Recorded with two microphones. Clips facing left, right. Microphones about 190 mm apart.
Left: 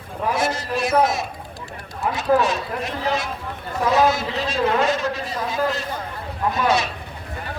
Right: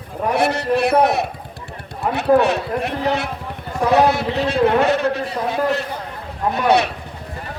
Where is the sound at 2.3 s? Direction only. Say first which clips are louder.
Right 4 dB; 60° right (ahead or behind).